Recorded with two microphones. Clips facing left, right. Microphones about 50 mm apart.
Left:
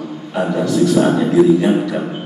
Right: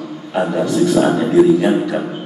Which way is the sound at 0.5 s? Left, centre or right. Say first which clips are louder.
Left 1 dB; centre.